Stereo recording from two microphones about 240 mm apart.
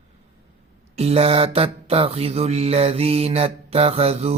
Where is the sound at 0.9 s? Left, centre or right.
Right.